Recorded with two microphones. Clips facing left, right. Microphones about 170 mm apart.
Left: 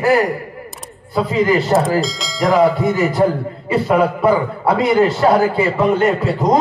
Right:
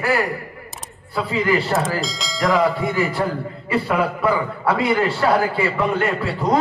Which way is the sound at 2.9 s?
40° left (ahead or behind).